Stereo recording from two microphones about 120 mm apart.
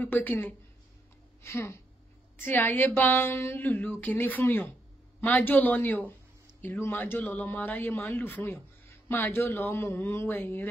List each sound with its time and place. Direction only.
0.0 s a woman's voice: 15° left (ahead or behind)